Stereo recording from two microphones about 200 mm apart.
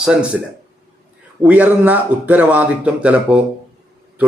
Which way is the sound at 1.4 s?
5° right (ahead or behind).